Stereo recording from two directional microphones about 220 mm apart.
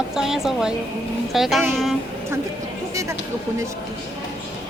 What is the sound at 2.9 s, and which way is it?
Speech, 15° right (ahead or behind).